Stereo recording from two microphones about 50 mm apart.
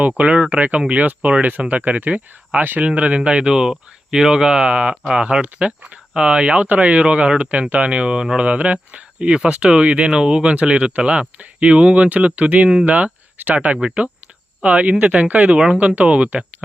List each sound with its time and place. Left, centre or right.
0.2 s speech: right
2.8 s speech: right
16.0 s speech: right